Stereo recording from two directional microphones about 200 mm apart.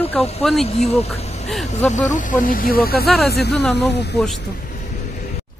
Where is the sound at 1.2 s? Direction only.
35° left (ahead or behind).